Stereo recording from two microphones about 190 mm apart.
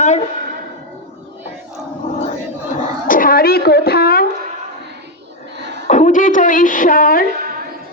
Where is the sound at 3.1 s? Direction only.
50° left (ahead or behind).